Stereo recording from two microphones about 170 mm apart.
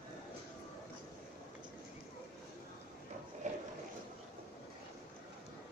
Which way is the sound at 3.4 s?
45° right (ahead or behind).